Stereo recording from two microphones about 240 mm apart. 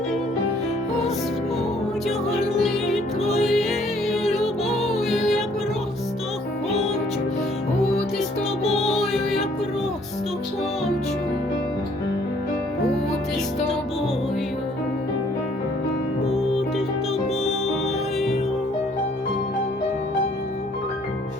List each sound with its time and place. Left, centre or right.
2.5 s music: centre
8.6 s music: left
16.2 s music: left